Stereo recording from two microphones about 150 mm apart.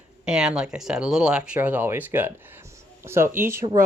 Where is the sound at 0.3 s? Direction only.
5° right (ahead or behind).